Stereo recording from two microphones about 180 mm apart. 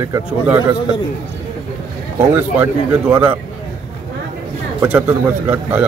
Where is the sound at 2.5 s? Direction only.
10° right (ahead or behind).